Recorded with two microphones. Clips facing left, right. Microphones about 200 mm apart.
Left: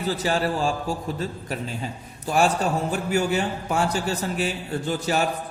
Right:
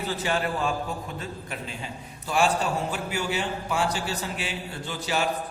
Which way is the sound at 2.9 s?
45° left (ahead or behind).